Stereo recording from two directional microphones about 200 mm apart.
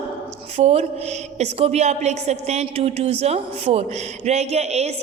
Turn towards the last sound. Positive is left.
turn(degrees=-35)  # may be behind; listen again after turning